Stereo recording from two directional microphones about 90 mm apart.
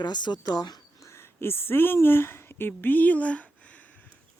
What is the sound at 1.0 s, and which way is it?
A woman's voice, 30° left (ahead or behind).